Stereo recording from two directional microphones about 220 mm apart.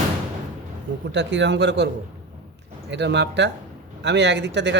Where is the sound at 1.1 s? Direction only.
55° right (ahead or behind).